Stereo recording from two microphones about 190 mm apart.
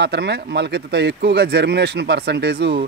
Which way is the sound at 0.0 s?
60° right (ahead or behind).